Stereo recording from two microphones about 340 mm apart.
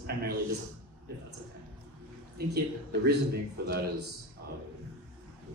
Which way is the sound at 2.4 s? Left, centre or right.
Right.